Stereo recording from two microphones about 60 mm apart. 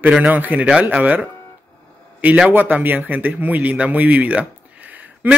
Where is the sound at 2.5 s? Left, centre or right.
Right.